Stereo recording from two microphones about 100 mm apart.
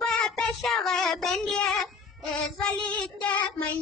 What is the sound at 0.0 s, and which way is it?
Child singing, 5° left (ahead or behind).